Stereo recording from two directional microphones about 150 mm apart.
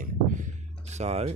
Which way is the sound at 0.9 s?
45° right (ahead or behind).